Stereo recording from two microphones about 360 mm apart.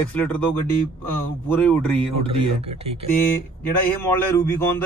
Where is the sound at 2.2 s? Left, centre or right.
Centre.